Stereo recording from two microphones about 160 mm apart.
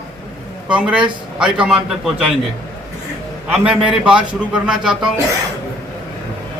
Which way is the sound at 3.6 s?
5° right (ahead or behind).